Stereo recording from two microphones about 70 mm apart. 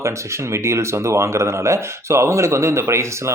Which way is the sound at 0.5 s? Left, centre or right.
Right.